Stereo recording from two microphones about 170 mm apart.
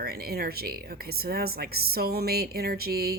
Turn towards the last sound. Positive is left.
turn(degrees=-65)  # may be behind; listen again after turning